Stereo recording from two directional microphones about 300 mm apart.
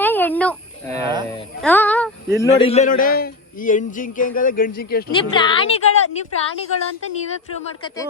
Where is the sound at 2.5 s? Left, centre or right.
Left.